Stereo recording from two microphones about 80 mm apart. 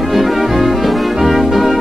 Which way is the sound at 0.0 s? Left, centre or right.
Centre.